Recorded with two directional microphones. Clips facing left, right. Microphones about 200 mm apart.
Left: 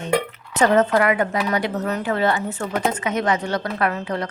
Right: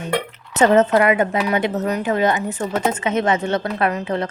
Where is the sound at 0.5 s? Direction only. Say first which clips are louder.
Right 3 dB; 25° right (ahead or behind).